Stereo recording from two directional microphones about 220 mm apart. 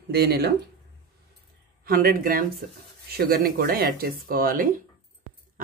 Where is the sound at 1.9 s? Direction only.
40° right (ahead or behind).